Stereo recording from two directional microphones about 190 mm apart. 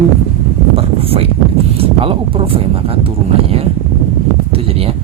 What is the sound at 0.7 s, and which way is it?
Speech, 30° right (ahead or behind).